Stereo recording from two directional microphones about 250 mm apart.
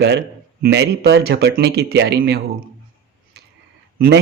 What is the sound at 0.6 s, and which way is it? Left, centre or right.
Speech, right.